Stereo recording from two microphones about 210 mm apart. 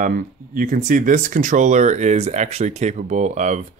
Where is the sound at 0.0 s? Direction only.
40° right (ahead or behind).